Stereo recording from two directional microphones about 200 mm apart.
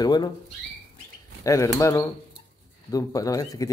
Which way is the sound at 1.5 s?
15° left (ahead or behind).